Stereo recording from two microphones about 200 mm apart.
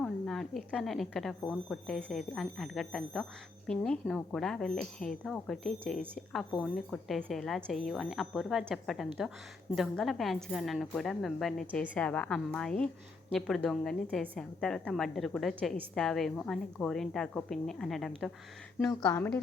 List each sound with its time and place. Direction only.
0.0 s a woman's voice: centre (ahead or behind)
18.9 s speech: 20° left (ahead or behind)